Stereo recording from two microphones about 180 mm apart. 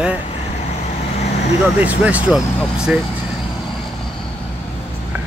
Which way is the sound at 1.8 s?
10° right (ahead or behind).